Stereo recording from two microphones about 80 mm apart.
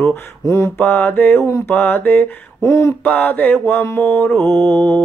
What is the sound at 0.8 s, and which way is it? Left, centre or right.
Mantra, left.